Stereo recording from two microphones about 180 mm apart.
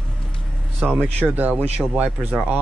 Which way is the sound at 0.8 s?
10° right (ahead or behind).